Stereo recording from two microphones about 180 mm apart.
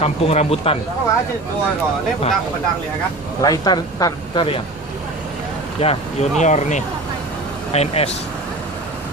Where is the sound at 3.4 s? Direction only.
20° left (ahead or behind).